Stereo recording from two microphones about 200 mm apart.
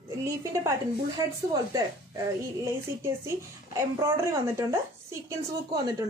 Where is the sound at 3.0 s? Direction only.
15° right (ahead or behind).